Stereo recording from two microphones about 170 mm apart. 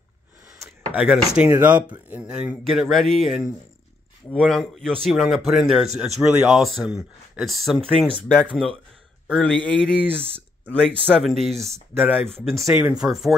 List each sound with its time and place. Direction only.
0.9 s speech: 5° right (ahead or behind)
10.0 s speech: 35° right (ahead or behind)
10.7 s speech: 5° left (ahead or behind)